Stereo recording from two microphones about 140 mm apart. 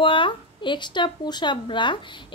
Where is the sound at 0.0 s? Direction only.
35° left (ahead or behind).